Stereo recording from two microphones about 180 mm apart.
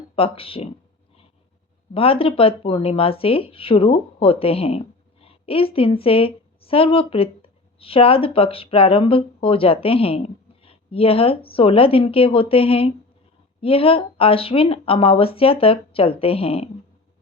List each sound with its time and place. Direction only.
0.2 s speech: 30° left (ahead or behind)
1.9 s speech: 30° left (ahead or behind)